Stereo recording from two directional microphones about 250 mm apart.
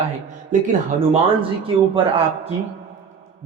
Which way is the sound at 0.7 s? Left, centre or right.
Right.